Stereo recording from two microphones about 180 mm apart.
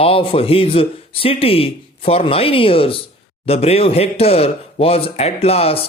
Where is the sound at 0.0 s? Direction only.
30° left (ahead or behind).